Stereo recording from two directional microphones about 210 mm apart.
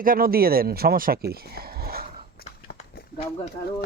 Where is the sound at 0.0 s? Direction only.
45° right (ahead or behind).